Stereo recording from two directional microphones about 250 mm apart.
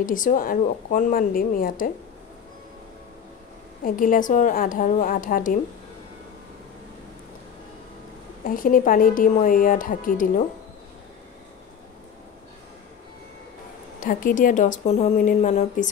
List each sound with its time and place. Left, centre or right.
0.0 s a woman's voice: left
3.8 s a woman's voice: left
8.5 s a woman's voice: left
13.9 s a woman's voice: left